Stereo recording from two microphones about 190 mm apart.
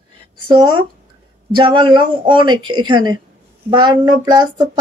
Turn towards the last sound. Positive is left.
turn(degrees=-20)  # may be behind; listen again after turning